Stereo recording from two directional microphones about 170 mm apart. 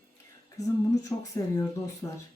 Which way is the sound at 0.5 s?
20° left (ahead or behind).